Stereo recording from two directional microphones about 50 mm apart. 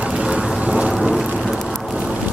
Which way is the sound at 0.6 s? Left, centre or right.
Right.